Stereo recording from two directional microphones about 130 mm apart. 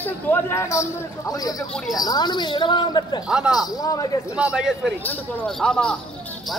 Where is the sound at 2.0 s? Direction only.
30° left (ahead or behind).